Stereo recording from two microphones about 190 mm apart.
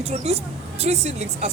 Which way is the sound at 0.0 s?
35° right (ahead or behind).